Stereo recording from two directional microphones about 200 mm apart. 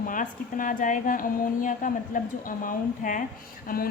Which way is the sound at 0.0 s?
40° left (ahead or behind).